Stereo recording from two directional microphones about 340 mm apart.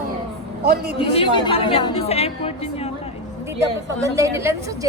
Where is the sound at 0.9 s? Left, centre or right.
Centre.